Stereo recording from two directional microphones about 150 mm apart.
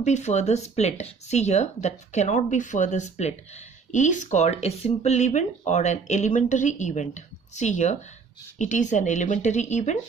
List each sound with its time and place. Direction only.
0.0 s speech: 50° left (ahead or behind)